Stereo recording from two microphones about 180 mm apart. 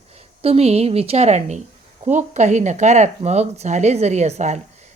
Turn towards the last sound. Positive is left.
turn(degrees=-40)  # may be behind; listen again after turning